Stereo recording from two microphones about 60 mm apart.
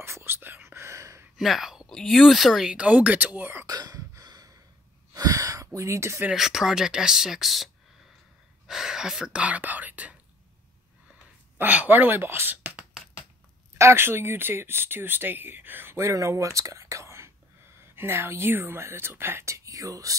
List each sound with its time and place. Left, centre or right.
0.0 s whispering: right
1.3 s whispering: centre
1.9 s speech: centre
2.7 s speech: right
3.3 s speech: right
3.6 s gasp: right
5.1 s a sound: right
5.8 s speech: right
6.3 s speech: centre
9.4 s speech: right
11.5 s speech: right
13.7 s speech: right
16.0 s speech: right
19.4 s speech: right